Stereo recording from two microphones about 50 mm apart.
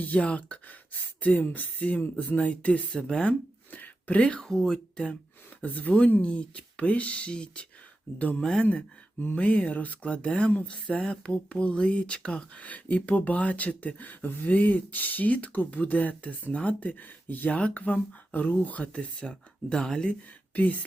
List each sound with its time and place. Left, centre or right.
0.0 s speech: left
3.7 s a sound: left
4.4 s speech: centre
5.6 s speech: left
9.3 s speech: left
12.6 s speech: left
19.7 s speech: centre